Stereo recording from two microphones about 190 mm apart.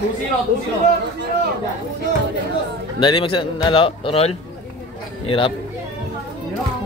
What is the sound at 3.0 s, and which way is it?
Speech, 25° left (ahead or behind).